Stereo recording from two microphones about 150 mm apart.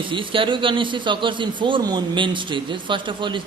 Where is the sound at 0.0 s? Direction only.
35° right (ahead or behind).